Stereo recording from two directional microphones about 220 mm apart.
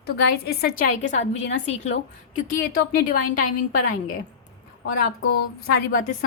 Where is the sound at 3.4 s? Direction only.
90° left.